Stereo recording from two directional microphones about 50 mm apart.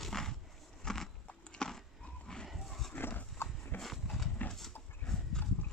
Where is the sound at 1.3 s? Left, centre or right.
Centre.